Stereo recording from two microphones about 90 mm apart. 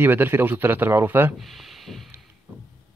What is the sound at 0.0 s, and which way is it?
Speech, 25° right (ahead or behind).